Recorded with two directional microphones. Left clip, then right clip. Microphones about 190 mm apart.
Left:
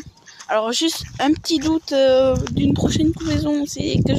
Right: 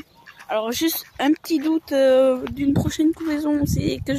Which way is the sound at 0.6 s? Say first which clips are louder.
Left 3 dB; 5° left (ahead or behind).